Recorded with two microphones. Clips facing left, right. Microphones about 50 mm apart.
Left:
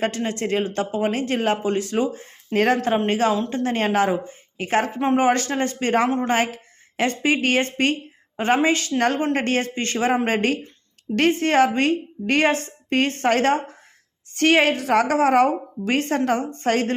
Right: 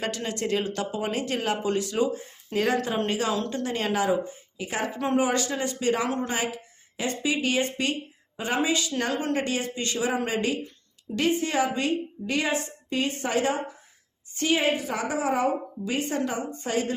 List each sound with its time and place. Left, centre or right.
0.0 s a woman's voice: left
4.9 s speech: left
5.2 s a woman's voice: left
6.1 s speech: left
6.3 s a woman's voice: left